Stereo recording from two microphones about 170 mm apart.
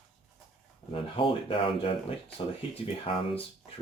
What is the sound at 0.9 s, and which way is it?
Speech, 30° left (ahead or behind).